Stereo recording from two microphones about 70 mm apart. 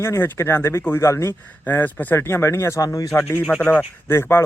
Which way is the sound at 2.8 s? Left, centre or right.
Left.